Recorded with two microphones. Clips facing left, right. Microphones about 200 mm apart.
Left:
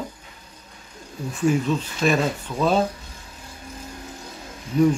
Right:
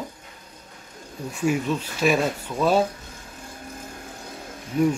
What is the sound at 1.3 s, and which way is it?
Speech, 10° right (ahead or behind).